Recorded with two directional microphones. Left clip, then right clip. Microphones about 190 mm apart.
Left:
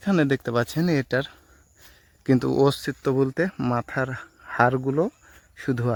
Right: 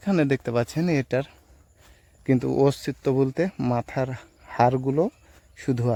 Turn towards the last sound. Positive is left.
turn(degrees=0)  # may be behind; listen again after turning